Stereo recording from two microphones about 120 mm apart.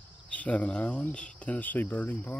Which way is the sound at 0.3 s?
10° left (ahead or behind).